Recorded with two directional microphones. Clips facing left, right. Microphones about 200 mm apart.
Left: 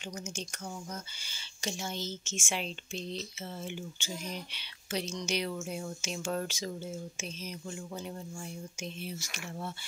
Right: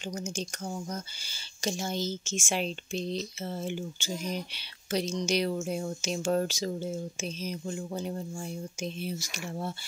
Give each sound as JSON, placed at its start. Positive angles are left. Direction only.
{"t": 1.3, "sound": "speech", "side_deg": -40}